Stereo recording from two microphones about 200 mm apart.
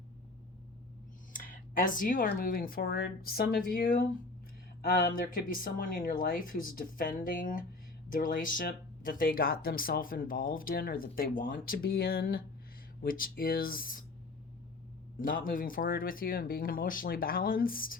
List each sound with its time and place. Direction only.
1.4 s speech: 45° left (ahead or behind)
15.2 s speech: 45° left (ahead or behind)